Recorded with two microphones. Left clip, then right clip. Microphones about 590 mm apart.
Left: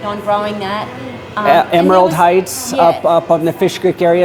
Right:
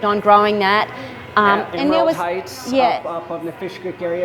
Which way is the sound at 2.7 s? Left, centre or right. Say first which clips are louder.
Left 5 dB; right.